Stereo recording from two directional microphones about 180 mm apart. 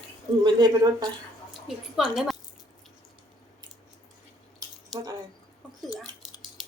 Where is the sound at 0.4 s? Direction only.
25° right (ahead or behind).